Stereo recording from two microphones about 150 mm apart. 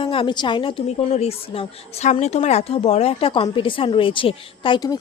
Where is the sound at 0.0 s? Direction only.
35° left (ahead or behind).